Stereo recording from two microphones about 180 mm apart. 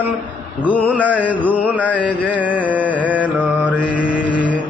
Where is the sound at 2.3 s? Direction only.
10° right (ahead or behind).